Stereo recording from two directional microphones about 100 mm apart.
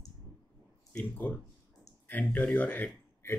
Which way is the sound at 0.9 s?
20° left (ahead or behind).